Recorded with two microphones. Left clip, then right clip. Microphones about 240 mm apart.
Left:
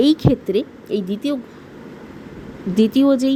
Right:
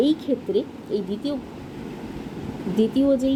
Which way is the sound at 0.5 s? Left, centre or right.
Left.